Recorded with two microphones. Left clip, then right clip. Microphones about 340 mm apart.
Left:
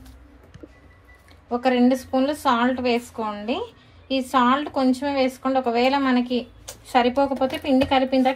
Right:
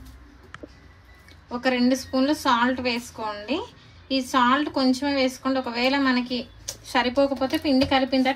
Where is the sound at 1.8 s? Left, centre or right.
Centre.